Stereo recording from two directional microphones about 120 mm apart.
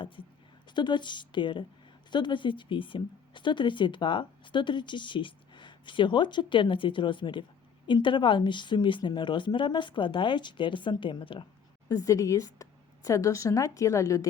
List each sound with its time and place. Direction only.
0.7 s speech: 40° left (ahead or behind)
11.9 s a woman's voice: 25° left (ahead or behind)